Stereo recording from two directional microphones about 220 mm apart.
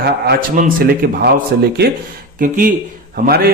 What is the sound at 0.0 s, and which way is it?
A man's voice, 45° right (ahead or behind).